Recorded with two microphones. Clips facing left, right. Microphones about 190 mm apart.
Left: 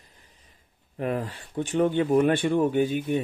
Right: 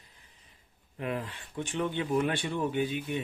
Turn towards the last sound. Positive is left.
turn(degrees=45)  # may be behind; listen again after turning